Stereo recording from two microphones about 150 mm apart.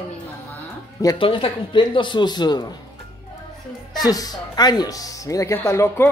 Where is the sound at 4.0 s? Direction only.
25° left (ahead or behind).